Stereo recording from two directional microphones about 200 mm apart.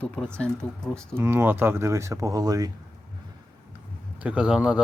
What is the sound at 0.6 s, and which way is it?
Speech, 5° left (ahead or behind).